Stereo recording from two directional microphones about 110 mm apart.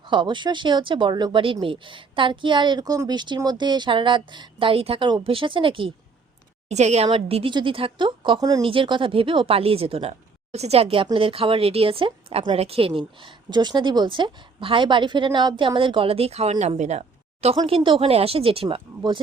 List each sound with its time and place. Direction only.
0.0 s a woman's voice: 45° right (ahead or behind)
6.7 s a woman's voice: 90° right
7.1 s a woman's voice: 55° right (ahead or behind); by 8.6 s 35° right (ahead or behind)
8.6 s speech: 50° right (ahead or behind)
13.0 s a woman's voice: 50° right (ahead or behind); by 17.0 s 90° right
17.7 s speech: 55° right (ahead or behind)